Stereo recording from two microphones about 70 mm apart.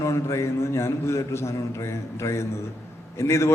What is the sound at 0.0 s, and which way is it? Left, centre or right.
A man's voice, left.